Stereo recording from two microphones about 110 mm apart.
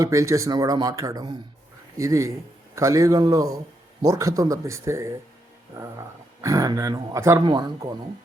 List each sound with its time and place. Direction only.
0.0 s speech: 30° right (ahead or behind)
6.4 s speech: 30° right (ahead or behind)